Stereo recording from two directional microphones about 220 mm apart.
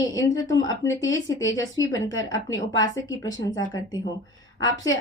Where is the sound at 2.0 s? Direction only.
60° left (ahead or behind).